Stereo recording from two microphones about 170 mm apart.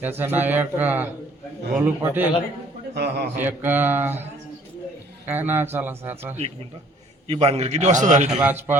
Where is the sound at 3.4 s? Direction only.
10° right (ahead or behind).